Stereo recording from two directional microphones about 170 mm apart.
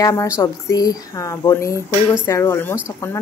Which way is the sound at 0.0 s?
20° left (ahead or behind).